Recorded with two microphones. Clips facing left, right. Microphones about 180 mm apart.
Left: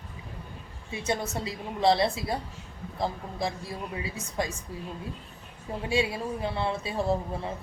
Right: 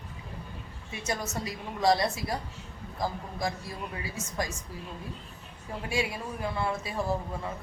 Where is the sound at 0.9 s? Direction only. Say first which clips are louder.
Left 3 dB; 25° left (ahead or behind).